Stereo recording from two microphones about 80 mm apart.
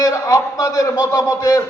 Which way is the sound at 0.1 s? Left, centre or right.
Left.